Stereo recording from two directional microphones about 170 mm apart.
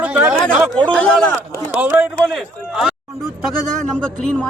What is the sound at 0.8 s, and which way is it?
A man's voice, 5° left (ahead or behind).